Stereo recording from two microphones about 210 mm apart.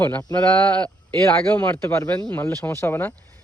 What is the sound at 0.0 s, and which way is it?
Speech, 15° left (ahead or behind).